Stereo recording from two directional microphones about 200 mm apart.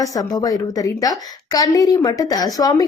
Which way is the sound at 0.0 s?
15° left (ahead or behind).